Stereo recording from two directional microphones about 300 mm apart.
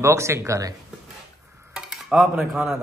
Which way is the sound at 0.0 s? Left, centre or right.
Centre.